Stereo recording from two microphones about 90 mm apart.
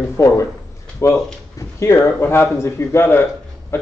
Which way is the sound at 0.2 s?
35° left (ahead or behind).